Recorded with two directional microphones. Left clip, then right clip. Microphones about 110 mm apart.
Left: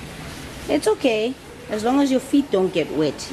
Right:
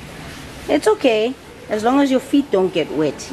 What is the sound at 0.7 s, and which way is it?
A woman's voice, 15° right (ahead or behind).